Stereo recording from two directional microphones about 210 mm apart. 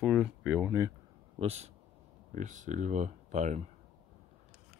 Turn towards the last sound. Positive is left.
turn(degrees=-35)  # may be behind; listen again after turning